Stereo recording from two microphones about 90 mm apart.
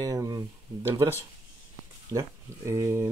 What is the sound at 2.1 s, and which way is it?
Speech, 40° right (ahead or behind).